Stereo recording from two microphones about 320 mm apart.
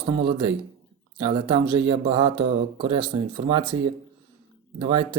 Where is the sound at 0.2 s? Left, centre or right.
Centre.